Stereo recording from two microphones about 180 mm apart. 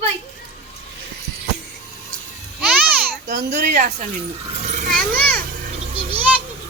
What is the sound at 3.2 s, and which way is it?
Speech, 45° right (ahead or behind).